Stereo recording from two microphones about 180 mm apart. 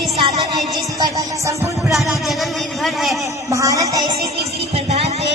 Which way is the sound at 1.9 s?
Centre (ahead or behind).